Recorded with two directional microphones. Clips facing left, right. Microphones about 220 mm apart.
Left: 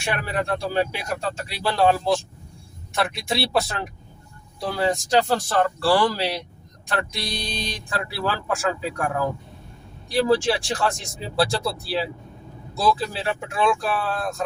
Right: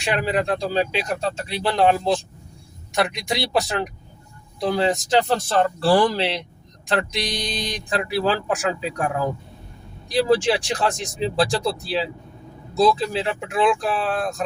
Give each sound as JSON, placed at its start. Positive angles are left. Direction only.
{"t": 0.0, "sound": "speech", "side_deg": -20}